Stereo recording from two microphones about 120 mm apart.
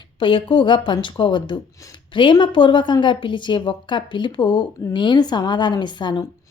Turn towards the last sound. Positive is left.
turn(degrees=40)  # may be behind; listen again after turning